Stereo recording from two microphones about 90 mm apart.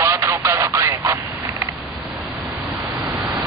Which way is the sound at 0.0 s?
30° right (ahead or behind).